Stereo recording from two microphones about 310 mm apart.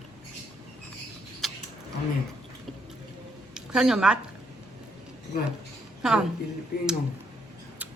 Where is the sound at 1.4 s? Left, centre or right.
Centre.